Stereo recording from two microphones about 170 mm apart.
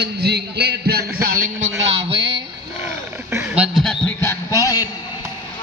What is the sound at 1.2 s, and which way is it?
Speech, 55° right (ahead or behind).